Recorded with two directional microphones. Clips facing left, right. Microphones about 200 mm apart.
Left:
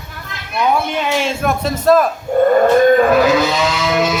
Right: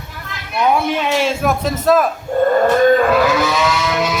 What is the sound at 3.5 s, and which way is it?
Vehicle, 25° left (ahead or behind).